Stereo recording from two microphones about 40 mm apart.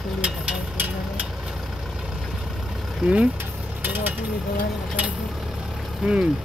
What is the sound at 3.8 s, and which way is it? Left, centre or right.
Vehicle, right.